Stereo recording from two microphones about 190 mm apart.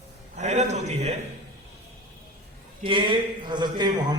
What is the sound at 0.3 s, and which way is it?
Speech, 35° right (ahead or behind).